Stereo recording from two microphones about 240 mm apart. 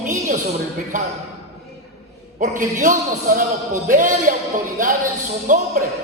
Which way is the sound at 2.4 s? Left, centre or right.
Right.